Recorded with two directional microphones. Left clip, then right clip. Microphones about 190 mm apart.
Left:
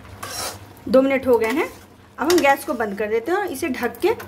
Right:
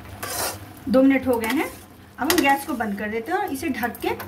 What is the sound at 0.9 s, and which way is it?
Speech, 55° left (ahead or behind).